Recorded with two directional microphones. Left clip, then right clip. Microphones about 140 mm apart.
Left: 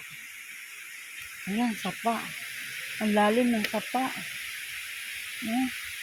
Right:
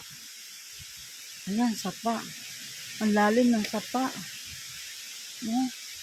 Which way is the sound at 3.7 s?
35° right (ahead or behind).